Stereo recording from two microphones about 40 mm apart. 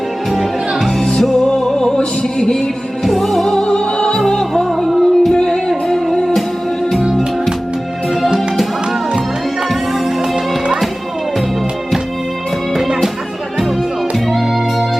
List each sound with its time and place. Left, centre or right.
0.3 s music: centre
1.0 s music: centre
3.0 s music: centre
3.4 s opera: centre
3.9 s music: centre
4.9 s music: centre
5.3 s music: centre
12.7 s music: centre